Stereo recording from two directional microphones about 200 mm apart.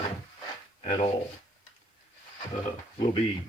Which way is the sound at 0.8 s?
30° left (ahead or behind).